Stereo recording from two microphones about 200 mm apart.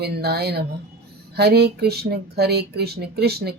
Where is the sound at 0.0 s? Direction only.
55° right (ahead or behind).